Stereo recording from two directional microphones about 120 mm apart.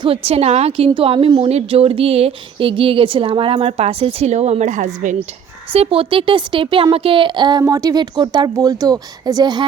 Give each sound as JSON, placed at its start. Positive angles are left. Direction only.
{"t": 0.0, "sound": "a woman's voice", "side_deg": -55}
{"t": 0.9, "sound": "a woman's voice", "side_deg": -50}
{"t": 5.7, "sound": "a woman's voice", "side_deg": -50}